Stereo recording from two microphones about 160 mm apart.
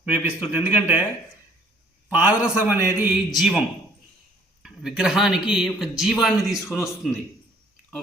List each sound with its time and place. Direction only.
0.0 s a man's voice: 10° right (ahead or behind)
2.0 s a man's voice: 10° right (ahead or behind)
4.6 s a man's voice: 5° right (ahead or behind)